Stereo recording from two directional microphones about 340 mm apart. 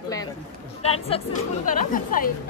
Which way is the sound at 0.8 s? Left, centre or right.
Centre.